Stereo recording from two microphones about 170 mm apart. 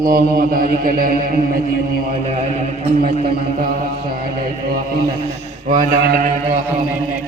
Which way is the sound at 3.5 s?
55° right (ahead or behind).